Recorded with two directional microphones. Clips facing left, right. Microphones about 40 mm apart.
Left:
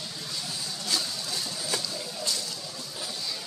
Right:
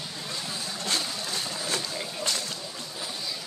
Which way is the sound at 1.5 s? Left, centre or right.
Right.